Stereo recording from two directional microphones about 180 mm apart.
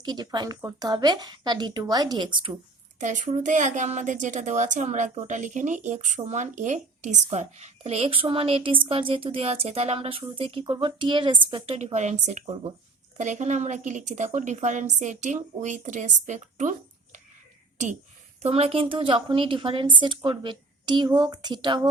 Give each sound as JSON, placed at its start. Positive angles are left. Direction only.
{"t": 0.0, "sound": "a woman's voice", "side_deg": -20}
{"t": 3.2, "sound": "a woman's voice", "side_deg": -40}
{"t": 18.4, "sound": "a woman's voice", "side_deg": -35}